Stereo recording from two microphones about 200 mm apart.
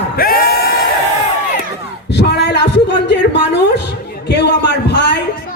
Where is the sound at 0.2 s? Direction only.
50° left (ahead or behind).